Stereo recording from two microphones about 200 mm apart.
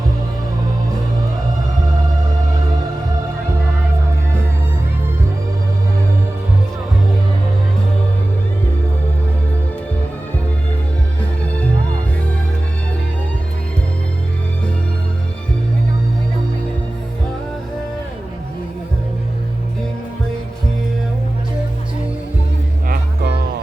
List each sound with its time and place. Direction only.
22.9 s music: 55° right (ahead or behind)